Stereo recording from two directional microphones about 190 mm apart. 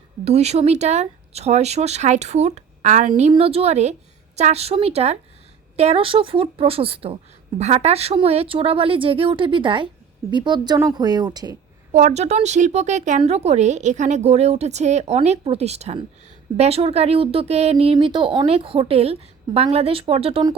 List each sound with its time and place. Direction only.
0.3 s speech: 35° right (ahead or behind)
11.9 s speech: 40° right (ahead or behind)